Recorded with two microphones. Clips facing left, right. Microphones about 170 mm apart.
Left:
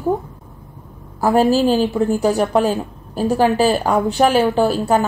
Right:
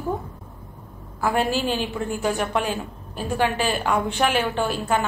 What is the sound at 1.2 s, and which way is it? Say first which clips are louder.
Speech: left 8 dB; 40° left (ahead or behind).